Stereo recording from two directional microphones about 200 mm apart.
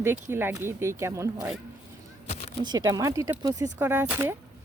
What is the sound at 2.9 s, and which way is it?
Speech, 15° right (ahead or behind).